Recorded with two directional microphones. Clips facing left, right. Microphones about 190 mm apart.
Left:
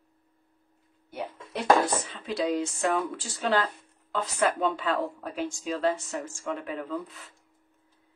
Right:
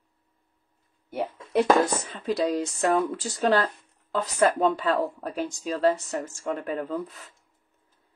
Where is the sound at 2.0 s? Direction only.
40° right (ahead or behind).